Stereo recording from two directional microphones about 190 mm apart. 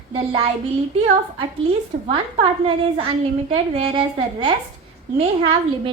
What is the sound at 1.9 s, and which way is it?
Speech, 40° right (ahead or behind).